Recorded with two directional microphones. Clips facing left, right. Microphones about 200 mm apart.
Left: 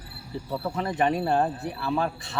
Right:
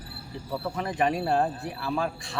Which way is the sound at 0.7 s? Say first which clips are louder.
Left 2 dB; 30° left (ahead or behind).